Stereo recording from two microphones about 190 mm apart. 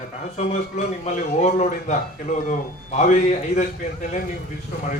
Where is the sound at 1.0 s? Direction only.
35° left (ahead or behind).